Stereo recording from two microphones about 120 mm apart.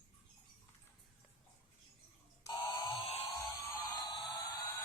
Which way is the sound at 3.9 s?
40° left (ahead or behind).